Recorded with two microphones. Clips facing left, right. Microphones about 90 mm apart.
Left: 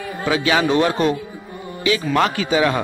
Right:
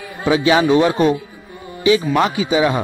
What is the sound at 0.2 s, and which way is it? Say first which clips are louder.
Speech: right 4 dB; 25° right (ahead or behind).